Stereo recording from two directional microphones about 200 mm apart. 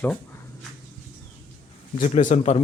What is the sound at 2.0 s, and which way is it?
Speech, 40° left (ahead or behind).